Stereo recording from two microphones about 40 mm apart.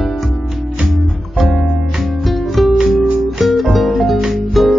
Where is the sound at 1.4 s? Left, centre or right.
Centre.